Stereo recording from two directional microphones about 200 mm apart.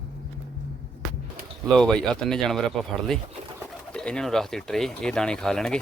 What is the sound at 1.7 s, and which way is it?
Speech, centre (ahead or behind).